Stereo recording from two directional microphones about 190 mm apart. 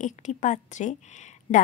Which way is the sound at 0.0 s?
40° left (ahead or behind).